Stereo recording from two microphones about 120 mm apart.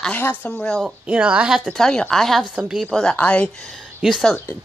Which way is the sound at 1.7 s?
5° left (ahead or behind).